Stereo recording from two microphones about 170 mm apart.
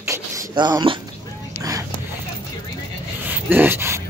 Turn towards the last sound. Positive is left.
turn(degrees=-15)  # may be behind; listen again after turning